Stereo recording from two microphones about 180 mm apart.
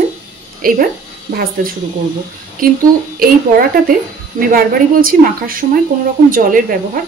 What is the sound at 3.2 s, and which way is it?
A woman's voice, 55° right (ahead or behind).